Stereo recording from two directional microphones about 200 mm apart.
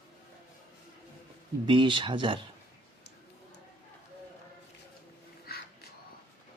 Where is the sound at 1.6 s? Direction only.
25° right (ahead or behind).